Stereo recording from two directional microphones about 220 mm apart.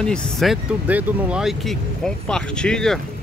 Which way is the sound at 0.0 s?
Centre (ahead or behind).